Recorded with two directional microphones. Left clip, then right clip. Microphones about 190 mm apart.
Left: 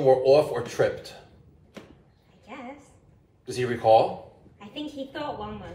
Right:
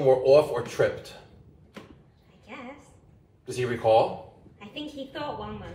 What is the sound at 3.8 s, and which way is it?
Speech, 20° left (ahead or behind).